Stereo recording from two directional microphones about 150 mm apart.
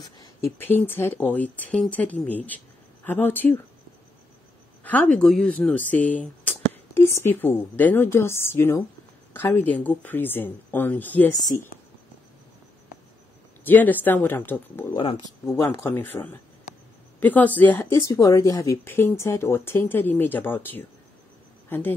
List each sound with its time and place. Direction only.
0.2 s speech: 15° left (ahead or behind)
5.1 s speech: 5° left (ahead or behind); by 11.7 s 20° left (ahead or behind)
13.7 s speech: 10° left (ahead or behind)